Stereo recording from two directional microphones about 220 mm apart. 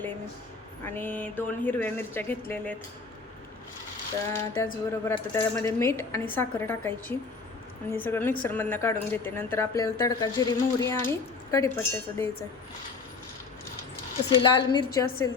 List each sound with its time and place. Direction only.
0.9 s a woman's voice: 10° left (ahead or behind)
4.3 s a woman's voice: 10° left (ahead or behind)
14.3 s a woman's voice: 20° left (ahead or behind)